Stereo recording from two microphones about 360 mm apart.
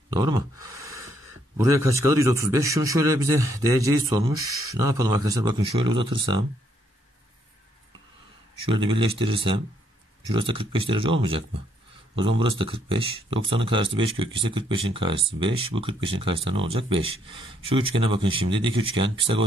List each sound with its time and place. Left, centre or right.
0.1 s a sound: centre
1.6 s a man's voice: centre
8.6 s a man's voice: centre